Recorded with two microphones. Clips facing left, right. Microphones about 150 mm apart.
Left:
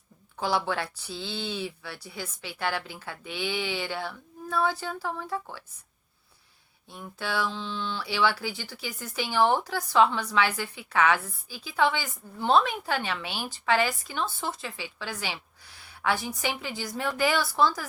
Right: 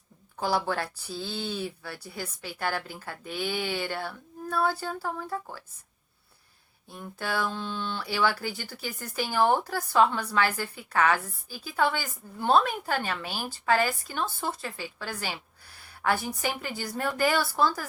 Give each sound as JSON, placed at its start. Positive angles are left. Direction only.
{"t": 0.3, "sound": "a woman's voice", "side_deg": -45}
{"t": 6.9, "sound": "a woman's voice", "side_deg": -45}